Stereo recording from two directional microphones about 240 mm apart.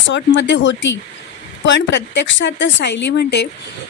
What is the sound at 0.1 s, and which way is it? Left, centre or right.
Speech, left.